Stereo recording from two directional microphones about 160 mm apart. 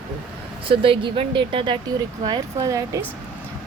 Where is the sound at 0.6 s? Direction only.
35° right (ahead or behind).